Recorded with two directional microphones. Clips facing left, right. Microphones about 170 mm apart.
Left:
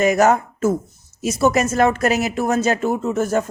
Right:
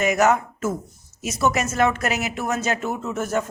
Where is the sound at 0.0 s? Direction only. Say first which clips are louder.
Left 4 dB; 35° left (ahead or behind).